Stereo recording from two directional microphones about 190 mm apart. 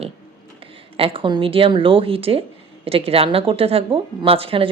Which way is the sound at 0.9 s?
30° right (ahead or behind).